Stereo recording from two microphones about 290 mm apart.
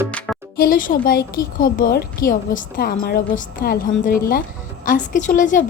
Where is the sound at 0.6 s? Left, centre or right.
Left.